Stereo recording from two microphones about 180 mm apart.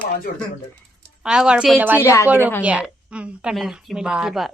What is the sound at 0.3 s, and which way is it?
Speech, 55° left (ahead or behind).